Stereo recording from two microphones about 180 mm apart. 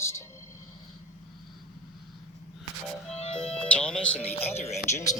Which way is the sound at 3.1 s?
5° left (ahead or behind).